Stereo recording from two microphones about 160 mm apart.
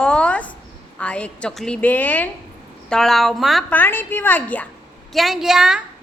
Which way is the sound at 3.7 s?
10° left (ahead or behind).